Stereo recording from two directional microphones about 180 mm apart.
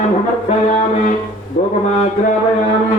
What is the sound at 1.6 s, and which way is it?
Mantra, 45° left (ahead or behind).